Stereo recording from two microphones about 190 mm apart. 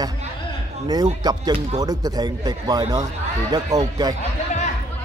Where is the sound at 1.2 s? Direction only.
20° right (ahead or behind).